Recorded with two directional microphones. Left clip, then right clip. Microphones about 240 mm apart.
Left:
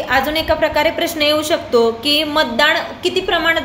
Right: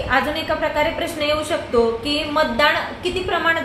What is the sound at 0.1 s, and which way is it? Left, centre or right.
A woman's voice, left.